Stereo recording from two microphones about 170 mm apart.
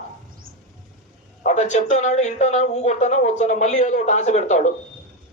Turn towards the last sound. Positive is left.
turn(degrees=45)  # may be behind; listen again after turning